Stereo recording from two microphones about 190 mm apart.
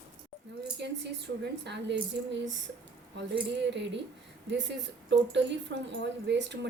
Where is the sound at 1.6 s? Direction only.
65° right (ahead or behind).